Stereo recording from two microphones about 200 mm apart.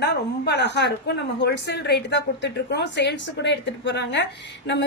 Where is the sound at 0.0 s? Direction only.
55° left (ahead or behind).